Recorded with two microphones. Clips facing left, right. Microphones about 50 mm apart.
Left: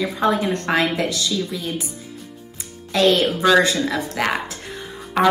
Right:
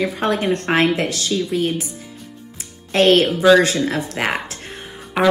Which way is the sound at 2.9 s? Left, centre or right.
Right.